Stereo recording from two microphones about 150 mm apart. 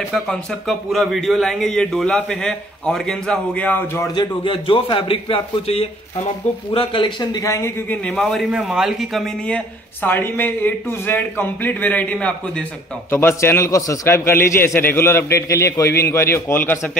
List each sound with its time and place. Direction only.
0.1 s a man's voice: centre (ahead or behind)
4.1 s a man's voice: 30° left (ahead or behind)
8.0 s a man's voice: 5° left (ahead or behind)
10.0 s a man's voice: 15° left (ahead or behind)